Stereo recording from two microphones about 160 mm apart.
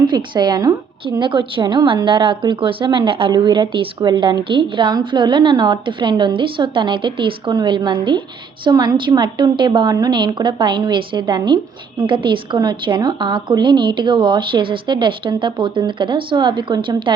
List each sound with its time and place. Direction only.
0.0 s a woman's voice: 30° right (ahead or behind)